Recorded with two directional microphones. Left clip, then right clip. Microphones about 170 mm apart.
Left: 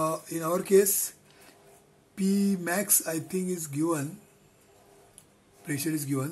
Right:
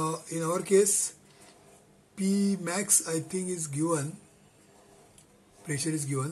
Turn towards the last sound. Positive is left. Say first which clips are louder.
# left 2 dB
turn(degrees=25)  # may be behind; listen again after turning